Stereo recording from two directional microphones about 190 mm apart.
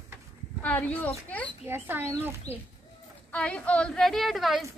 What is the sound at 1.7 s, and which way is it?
Speech, 15° right (ahead or behind).